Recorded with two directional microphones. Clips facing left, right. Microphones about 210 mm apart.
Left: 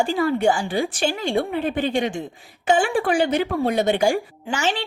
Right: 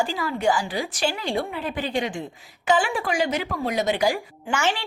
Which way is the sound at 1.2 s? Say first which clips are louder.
Left 5 dB; 25° left (ahead or behind).